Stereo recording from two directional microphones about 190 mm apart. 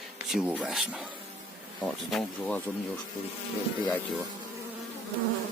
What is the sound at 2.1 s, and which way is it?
Speech, 5° left (ahead or behind).